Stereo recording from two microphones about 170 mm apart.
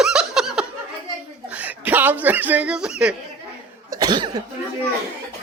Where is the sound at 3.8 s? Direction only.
25° right (ahead or behind).